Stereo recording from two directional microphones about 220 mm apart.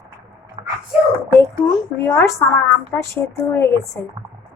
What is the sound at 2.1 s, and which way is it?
Speech, 10° left (ahead or behind).